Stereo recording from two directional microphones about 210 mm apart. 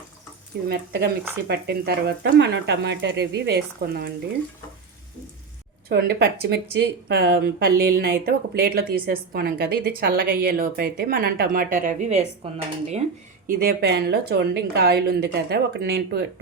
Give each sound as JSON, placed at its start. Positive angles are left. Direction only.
{"t": 0.7, "sound": "speech", "side_deg": -50}
{"t": 5.9, "sound": "speech", "side_deg": -50}
{"t": 13.6, "sound": "speech", "side_deg": -50}